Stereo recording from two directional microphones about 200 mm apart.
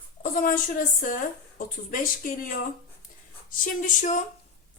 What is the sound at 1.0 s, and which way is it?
Speech, 45° left (ahead or behind).